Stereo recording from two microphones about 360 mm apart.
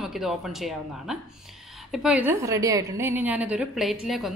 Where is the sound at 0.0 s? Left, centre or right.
Centre.